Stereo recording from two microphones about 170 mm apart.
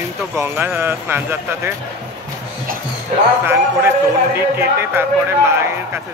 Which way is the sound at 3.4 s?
15° right (ahead or behind).